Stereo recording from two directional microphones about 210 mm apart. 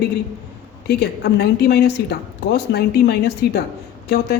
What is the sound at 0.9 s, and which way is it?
Speech, 50° left (ahead or behind).